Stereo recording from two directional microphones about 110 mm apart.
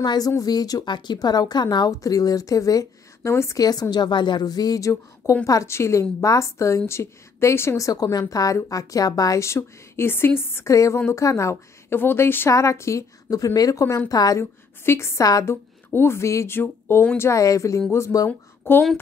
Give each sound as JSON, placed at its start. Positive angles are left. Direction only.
{"t": 0.0, "sound": "a woman's voice", "side_deg": 40}
{"t": 17.3, "sound": "a woman's voice", "side_deg": 30}